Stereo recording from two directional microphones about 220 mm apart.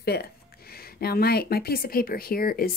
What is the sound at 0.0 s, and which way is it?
Speech, 45° left (ahead or behind).